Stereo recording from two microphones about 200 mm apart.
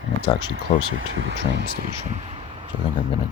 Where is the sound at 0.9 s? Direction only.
60° right (ahead or behind).